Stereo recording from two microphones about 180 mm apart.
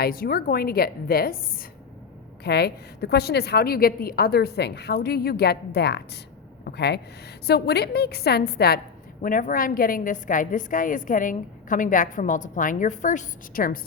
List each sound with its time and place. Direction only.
0.0 s a woman's voice: 55° left (ahead or behind)
2.4 s a woman's voice: 65° left (ahead or behind)
9.2 s a woman's voice: 50° left (ahead or behind)